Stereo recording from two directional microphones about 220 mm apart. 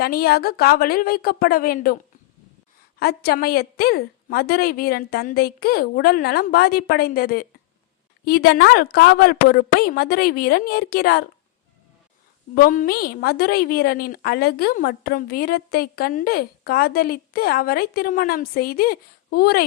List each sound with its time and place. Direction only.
0.0 s a woman's voice: 45° left (ahead or behind)
3.0 s a woman's voice: 45° left (ahead or behind)
12.5 s a woman's voice: 40° left (ahead or behind)